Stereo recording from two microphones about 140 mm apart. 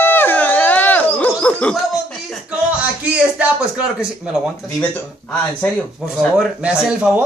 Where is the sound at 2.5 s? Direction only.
10° right (ahead or behind).